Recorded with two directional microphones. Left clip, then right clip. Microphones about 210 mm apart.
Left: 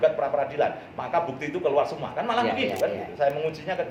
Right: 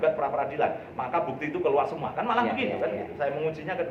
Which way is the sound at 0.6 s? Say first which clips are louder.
Left 1 dB; 15° left (ahead or behind).